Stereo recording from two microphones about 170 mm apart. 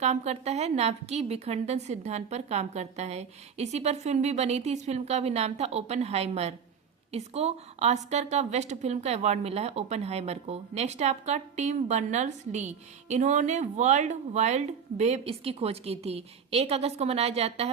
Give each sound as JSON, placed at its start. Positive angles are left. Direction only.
{"t": 0.0, "sound": "a woman's voice", "side_deg": -40}